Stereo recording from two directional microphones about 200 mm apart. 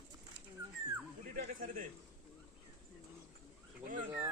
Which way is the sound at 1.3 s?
45° right (ahead or behind).